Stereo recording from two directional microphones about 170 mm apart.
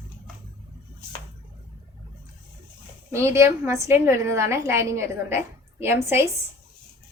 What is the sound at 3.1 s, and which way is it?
A woman's voice, 15° right (ahead or behind).